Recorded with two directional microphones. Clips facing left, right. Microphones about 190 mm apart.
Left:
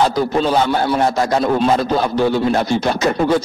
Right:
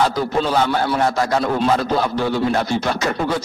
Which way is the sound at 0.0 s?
20° left (ahead or behind).